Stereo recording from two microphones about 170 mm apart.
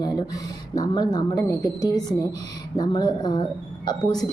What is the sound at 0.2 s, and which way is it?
A woman's voice, 20° left (ahead or behind).